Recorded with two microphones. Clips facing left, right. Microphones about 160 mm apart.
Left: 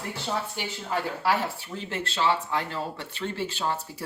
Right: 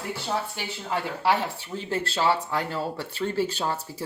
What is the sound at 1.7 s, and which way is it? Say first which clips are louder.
Speech: right 3 dB; 35° right (ahead or behind).